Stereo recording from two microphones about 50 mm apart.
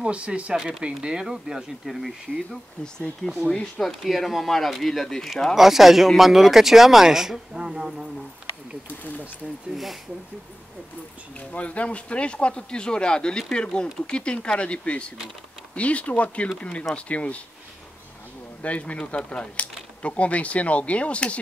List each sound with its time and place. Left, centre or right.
0.0 s speech: right; by 2.6 s centre
3.5 s speech: centre
4.0 s speech: centre
11.5 s speech: left
18.6 s speech: left